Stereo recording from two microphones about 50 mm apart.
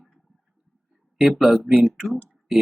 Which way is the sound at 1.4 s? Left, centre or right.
Centre.